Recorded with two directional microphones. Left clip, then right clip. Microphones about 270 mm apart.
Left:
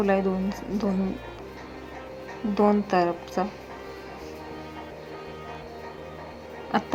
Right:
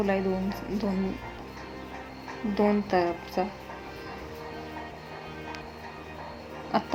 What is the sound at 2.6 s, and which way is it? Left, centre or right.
Speech, centre.